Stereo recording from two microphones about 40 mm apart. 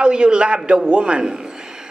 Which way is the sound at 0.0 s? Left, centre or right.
Right.